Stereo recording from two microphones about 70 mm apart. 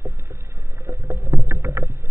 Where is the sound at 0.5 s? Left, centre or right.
Right.